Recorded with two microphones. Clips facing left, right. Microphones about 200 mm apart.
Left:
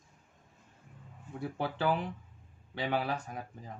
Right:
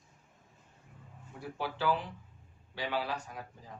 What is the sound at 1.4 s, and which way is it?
Speech, 55° left (ahead or behind).